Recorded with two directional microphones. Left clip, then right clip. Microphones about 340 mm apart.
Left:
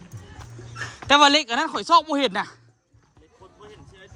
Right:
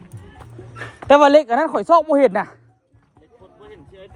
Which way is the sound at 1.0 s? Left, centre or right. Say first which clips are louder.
Right 5 dB; centre.